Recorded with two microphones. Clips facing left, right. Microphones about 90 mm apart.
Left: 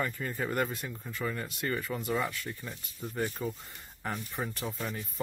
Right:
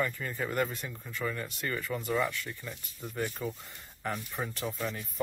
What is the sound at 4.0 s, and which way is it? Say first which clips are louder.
Speech: even; 5° left (ahead or behind).